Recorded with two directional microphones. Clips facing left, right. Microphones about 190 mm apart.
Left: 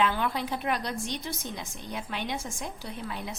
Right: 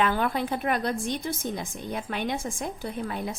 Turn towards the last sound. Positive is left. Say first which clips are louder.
# right 5 dB
turn(degrees=-50)  # may be behind; listen again after turning